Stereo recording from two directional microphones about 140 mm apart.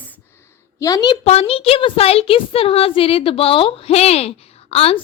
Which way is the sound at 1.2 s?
50° left (ahead or behind).